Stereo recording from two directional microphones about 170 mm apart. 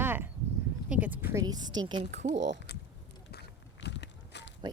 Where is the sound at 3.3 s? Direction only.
85° left.